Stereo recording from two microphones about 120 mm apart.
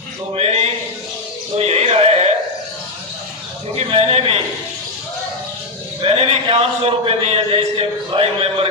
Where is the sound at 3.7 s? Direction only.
55° right (ahead or behind).